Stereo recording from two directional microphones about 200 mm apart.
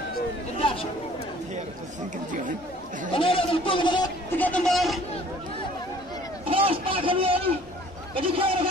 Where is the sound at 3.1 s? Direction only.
25° left (ahead or behind).